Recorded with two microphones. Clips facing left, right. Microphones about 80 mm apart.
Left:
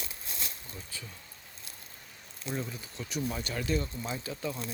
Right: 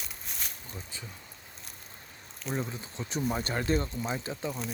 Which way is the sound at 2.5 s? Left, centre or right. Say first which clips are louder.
Right 3 dB; right.